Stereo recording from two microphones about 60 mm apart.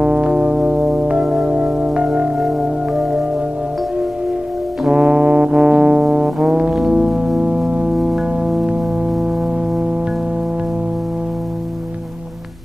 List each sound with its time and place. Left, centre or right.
0.0 s music: centre
1.2 s music: centre
1.5 s music: centre
2.3 s music: centre
4.8 s brass instrument: centre
7.1 s music: centre
7.3 s music: centre
7.9 s music: centre